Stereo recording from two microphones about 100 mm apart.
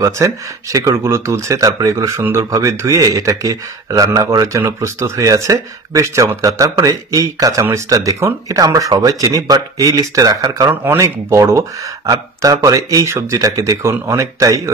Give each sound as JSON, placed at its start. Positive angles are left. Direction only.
{"t": 0.0, "sound": "speech", "side_deg": -35}
{"t": 10.7, "sound": "speech", "side_deg": -25}